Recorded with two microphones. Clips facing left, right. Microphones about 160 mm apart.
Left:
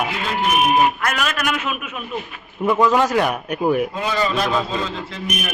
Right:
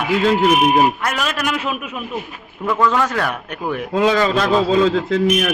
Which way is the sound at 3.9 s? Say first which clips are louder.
Right 6 dB; 90° right.